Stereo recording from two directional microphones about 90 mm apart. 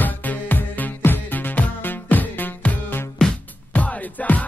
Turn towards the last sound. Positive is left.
turn(degrees=15)  # may be behind; listen again after turning